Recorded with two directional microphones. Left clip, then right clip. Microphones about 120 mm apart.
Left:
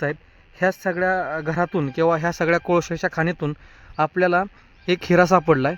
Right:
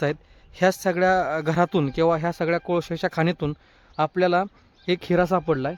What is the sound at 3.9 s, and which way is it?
Speech, 10° right (ahead or behind).